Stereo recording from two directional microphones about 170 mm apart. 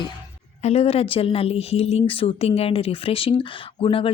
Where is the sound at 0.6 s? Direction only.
35° left (ahead or behind).